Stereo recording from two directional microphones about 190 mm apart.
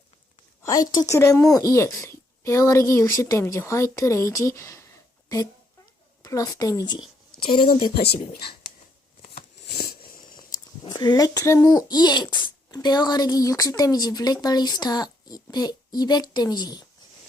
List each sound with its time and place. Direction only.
0.9 s speech: 20° left (ahead or behind)
6.2 s a child's voice: 20° left (ahead or behind)
9.3 s a sound: 55° left (ahead or behind)
10.8 s a child's voice: 20° left (ahead or behind)